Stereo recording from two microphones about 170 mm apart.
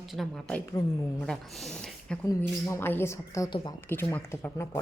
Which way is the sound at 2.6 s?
15° left (ahead or behind).